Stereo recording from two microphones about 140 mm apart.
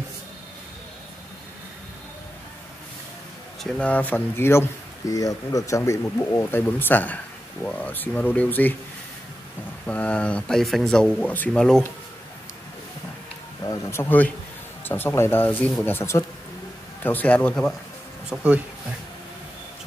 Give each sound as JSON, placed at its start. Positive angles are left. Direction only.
{"t": 3.6, "sound": "speech", "side_deg": 5}
{"t": 9.8, "sound": "speech", "side_deg": 10}
{"t": 13.7, "sound": "speech", "side_deg": 20}
{"t": 18.3, "sound": "speech", "side_deg": -10}